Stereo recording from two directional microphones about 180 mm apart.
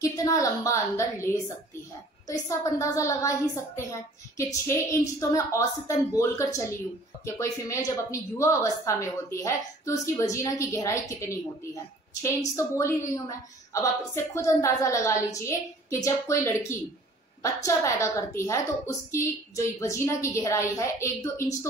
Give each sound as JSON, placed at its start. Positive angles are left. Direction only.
{"t": 0.0, "sound": "a woman's voice", "side_deg": 20}
{"t": 2.8, "sound": "a woman's voice", "side_deg": 15}